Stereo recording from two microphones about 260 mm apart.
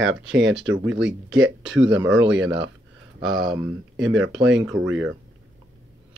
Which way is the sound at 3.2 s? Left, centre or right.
Right.